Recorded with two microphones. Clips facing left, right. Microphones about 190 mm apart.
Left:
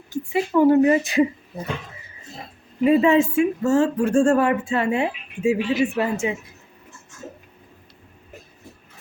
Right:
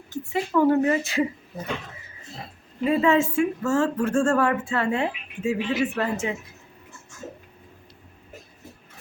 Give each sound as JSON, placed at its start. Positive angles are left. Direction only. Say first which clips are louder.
{"t": 0.1, "sound": "a woman's voice", "louder": "left 3 dB", "side_deg": 15}
{"t": 2.8, "sound": "a woman's voice", "louder": "left 4 dB", "side_deg": 15}